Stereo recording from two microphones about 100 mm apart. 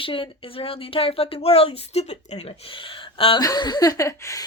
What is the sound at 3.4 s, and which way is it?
Speech, 40° left (ahead or behind).